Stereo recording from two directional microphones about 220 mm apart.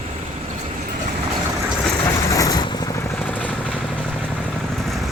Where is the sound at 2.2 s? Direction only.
15° left (ahead or behind).